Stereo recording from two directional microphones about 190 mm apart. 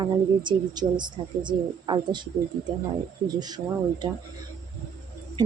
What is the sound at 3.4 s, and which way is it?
Speech, 20° right (ahead or behind).